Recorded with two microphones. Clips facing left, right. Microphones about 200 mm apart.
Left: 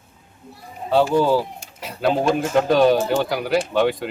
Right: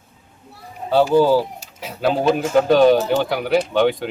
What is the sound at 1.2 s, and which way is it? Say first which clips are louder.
Speech: right 3 dB; centre (ahead or behind).